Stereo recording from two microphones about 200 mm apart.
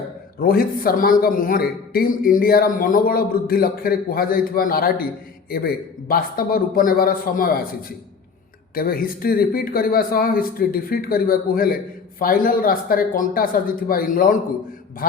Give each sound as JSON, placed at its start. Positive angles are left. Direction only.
{"t": 0.3, "sound": "speech", "side_deg": 45}
{"t": 8.7, "sound": "speech", "side_deg": 45}